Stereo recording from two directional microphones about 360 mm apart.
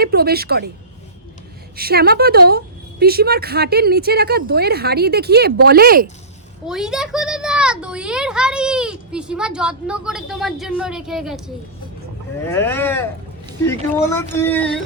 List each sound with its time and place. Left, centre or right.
0.0 s a woman's voice: right
1.7 s a woman's voice: right
6.7 s a child's voice: centre
12.4 s a sound: centre